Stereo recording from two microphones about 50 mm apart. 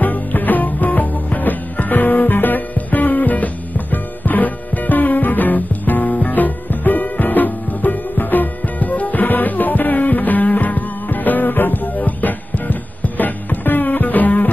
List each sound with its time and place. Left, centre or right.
0.0 s music: left